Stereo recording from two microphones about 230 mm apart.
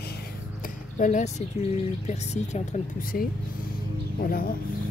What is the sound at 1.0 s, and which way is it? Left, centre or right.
Speech, left.